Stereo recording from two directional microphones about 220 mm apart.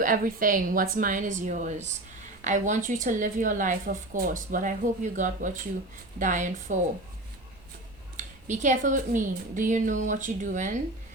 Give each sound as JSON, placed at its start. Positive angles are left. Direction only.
{"t": 0.0, "sound": "a woman's voice", "side_deg": -40}
{"t": 8.1, "sound": "a woman's voice", "side_deg": -35}